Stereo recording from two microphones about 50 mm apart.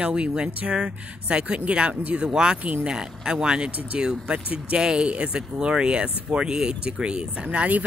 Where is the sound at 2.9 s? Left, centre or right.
Centre.